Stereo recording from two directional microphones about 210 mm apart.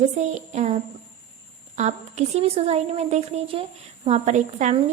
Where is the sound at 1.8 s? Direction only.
30° right (ahead or behind).